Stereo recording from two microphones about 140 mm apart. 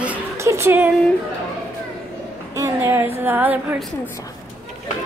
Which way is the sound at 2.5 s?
20° right (ahead or behind).